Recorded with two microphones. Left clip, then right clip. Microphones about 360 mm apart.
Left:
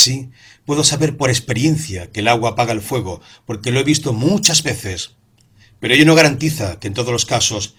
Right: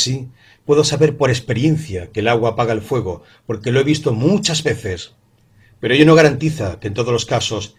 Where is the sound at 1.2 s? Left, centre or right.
Centre.